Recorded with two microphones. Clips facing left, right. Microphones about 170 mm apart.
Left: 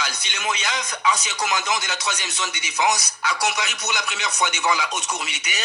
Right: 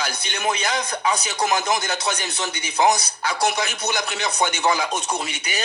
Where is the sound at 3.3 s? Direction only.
55° right (ahead or behind).